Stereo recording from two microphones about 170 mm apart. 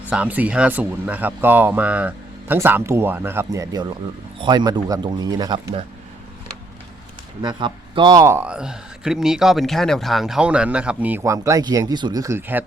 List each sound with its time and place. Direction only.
0.1 s speech: 10° right (ahead or behind)
7.4 s speech: 25° right (ahead or behind); by 11.2 s 5° right (ahead or behind)
11.2 s speech: 20° right (ahead or behind)